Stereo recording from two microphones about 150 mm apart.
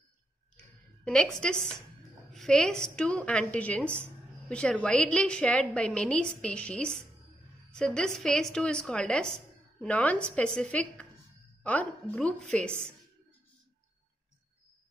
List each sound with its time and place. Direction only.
1.0 s a woman's voice: 5° left (ahead or behind)